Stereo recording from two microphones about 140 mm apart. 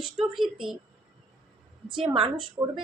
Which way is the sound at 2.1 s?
40° right (ahead or behind).